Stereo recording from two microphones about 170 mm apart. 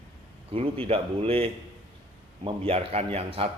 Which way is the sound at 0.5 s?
35° right (ahead or behind).